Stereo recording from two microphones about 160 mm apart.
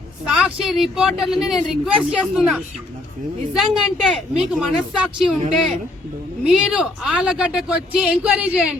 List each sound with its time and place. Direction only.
0.3 s speech: 5° right (ahead or behind)
6.4 s speech: 5° right (ahead or behind)